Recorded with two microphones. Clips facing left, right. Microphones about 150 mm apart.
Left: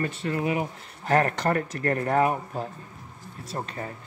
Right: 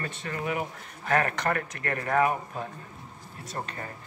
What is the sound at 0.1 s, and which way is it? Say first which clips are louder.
Speech: left 5 dB; 30° left (ahead or behind).